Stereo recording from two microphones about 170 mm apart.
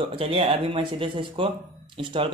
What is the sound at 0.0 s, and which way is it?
Speech, 30° right (ahead or behind).